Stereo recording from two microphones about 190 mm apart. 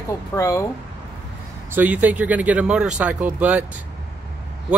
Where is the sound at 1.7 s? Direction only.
10° right (ahead or behind).